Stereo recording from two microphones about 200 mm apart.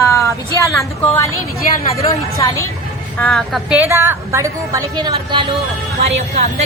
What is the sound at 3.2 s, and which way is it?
A woman's voice, centre (ahead or behind).